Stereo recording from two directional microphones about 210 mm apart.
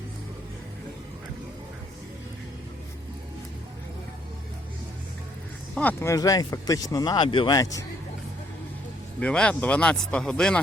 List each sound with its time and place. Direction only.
5.7 s speech: 10° left (ahead or behind)
9.2 s speech: 5° left (ahead or behind)